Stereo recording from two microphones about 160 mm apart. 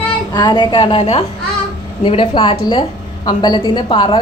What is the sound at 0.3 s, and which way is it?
A woman's voice, 30° left (ahead or behind).